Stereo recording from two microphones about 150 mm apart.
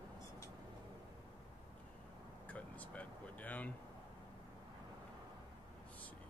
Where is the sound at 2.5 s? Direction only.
10° left (ahead or behind).